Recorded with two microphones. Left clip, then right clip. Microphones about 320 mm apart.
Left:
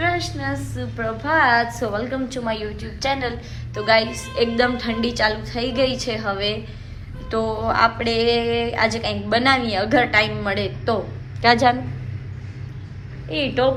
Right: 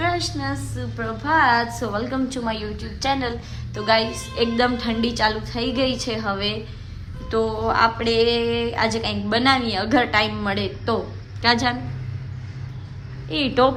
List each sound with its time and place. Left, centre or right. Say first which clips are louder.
0.0 s a sound: left 1 dB; centre
0.6 s music: left 3 dB; centre
11.4 s a woman's voice: left 4 dB; centre
13.2 s music: right 1 dB; centre